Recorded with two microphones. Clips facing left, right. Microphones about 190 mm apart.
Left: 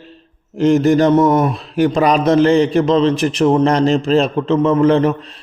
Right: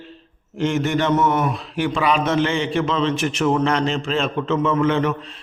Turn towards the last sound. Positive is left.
turn(degrees=35)  # may be behind; listen again after turning